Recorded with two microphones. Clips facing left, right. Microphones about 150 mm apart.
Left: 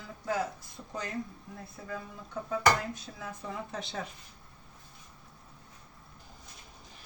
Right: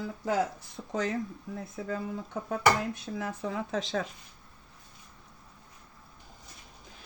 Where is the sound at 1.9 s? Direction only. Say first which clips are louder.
Right 6 dB; 75° right (ahead or behind).